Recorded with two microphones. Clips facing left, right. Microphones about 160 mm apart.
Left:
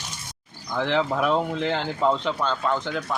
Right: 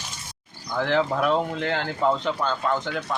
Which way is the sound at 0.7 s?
Centre (ahead or behind).